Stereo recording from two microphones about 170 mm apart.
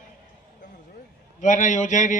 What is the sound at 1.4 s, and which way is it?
Speech, 45° left (ahead or behind).